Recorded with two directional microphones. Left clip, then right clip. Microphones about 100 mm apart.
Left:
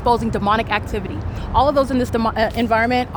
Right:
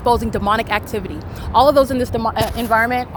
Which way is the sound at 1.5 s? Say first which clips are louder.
Right 4 dB; 40° right (ahead or behind).